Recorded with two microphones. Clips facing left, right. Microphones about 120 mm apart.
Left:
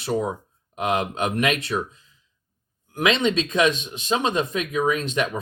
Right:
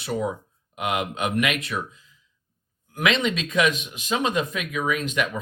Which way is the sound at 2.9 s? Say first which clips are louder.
Left 2 dB; 25° left (ahead or behind).